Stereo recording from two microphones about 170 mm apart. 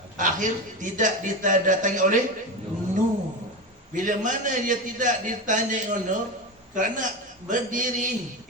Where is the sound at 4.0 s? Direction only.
50° right (ahead or behind).